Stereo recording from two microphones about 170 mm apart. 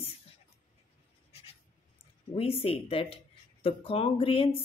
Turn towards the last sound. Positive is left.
turn(degrees=35)  # may be behind; listen again after turning